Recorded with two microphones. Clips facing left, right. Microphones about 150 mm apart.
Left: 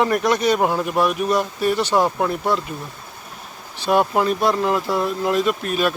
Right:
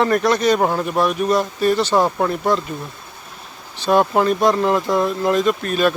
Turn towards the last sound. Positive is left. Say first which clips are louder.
# right 3 dB
turn(degrees=5)  # may be behind; listen again after turning